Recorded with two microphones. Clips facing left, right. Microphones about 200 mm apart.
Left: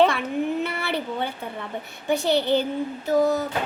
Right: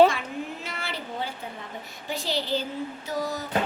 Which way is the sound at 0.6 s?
60° left (ahead or behind).